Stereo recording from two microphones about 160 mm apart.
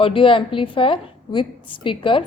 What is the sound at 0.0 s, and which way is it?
A woman's voice, 35° left (ahead or behind).